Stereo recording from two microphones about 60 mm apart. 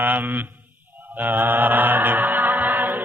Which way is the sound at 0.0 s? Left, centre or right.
Right.